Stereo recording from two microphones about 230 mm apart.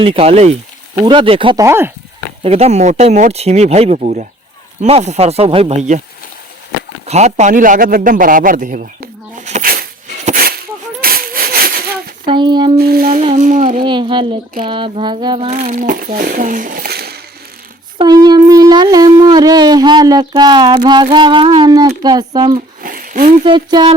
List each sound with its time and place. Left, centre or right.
0.0 s speech: right
2.4 s speech: right
7.0 s a sound: right
12.2 s a sound: right
12.7 s speech: right
13.8 s speech: right
17.9 s wind instrument: centre
22.4 s speech: centre
22.8 s a sound: right
23.4 s speech: right